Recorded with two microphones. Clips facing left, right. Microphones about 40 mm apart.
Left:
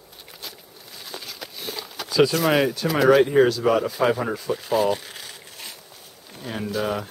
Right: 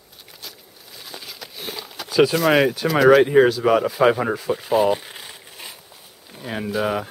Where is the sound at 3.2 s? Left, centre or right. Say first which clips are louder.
Right 2 dB; centre.